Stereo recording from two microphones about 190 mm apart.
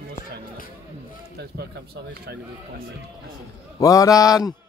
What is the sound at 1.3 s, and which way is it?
Speech, 55° right (ahead or behind).